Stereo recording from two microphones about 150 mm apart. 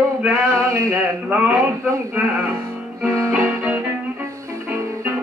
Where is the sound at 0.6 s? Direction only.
20° right (ahead or behind).